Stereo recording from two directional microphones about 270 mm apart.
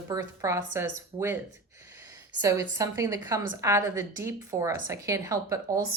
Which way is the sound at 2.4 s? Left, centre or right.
Centre.